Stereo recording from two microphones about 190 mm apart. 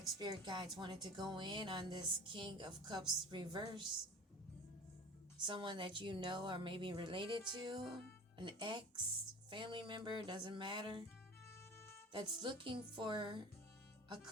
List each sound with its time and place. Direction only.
0.2 s a woman's voice: 20° right (ahead or behind)
5.4 s a woman's voice: 25° right (ahead or behind)
11.4 s music: 10° left (ahead or behind)
12.1 s a woman's voice: 25° right (ahead or behind)